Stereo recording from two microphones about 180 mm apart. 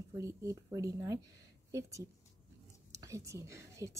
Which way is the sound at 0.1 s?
15° right (ahead or behind).